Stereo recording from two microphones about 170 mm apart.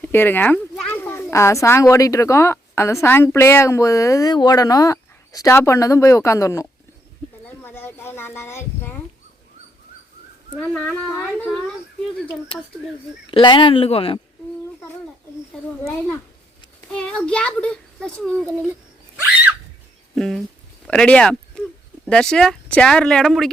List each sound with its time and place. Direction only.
0.0 s a child's voice: 10° left (ahead or behind)
7.4 s a sound: 10° left (ahead or behind)
13.3 s speech: 25° left (ahead or behind)
15.8 s a child's voice: 15° left (ahead or behind)
20.1 s a child's voice: centre (ahead or behind)